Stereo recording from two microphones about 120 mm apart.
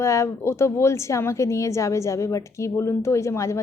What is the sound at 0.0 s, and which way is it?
A woman's voice, 25° left (ahead or behind).